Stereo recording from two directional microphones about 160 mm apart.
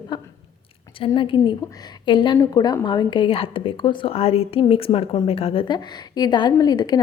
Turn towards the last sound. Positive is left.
turn(degrees=25)  # may be behind; listen again after turning